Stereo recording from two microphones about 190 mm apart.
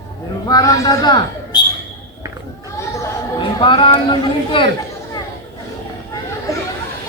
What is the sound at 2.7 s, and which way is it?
Chatter, 15° left (ahead or behind).